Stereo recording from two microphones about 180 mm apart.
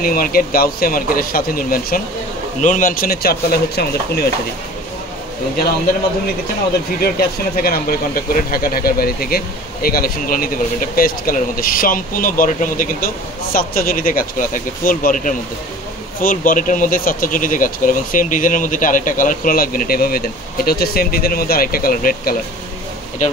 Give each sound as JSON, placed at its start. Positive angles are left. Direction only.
{"t": 0.0, "sound": "speech", "side_deg": 55}
{"t": 7.0, "sound": "speech", "side_deg": 55}